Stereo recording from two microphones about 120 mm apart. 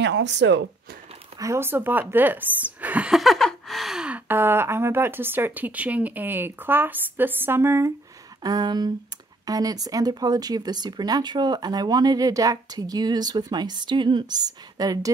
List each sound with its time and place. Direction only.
1.4 s speech: 20° right (ahead or behind)
8.4 s speech: 35° right (ahead or behind)